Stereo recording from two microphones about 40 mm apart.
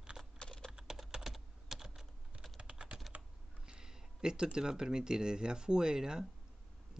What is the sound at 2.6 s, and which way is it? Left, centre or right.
Typing, right.